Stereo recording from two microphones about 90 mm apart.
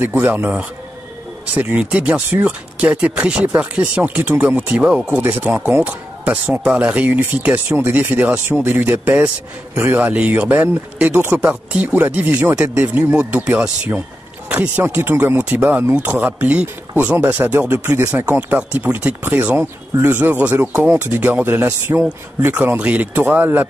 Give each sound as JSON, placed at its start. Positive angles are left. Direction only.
{"t": 0.0, "sound": "speech", "side_deg": -20}